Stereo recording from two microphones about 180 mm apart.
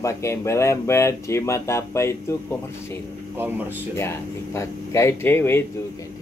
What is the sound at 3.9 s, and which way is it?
Speech, 15° left (ahead or behind).